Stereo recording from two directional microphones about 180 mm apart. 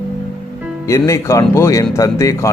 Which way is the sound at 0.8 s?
15° left (ahead or behind).